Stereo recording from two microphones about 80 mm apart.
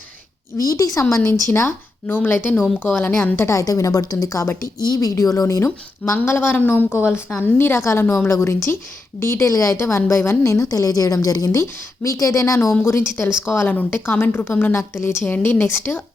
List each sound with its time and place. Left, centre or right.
0.5 s speech: left
1.1 s a woman's voice: left
3.6 s a woman's voice: left
12.8 s a woman's voice: left